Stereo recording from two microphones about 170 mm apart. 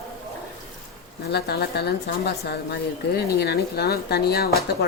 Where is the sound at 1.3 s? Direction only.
70° left (ahead or behind).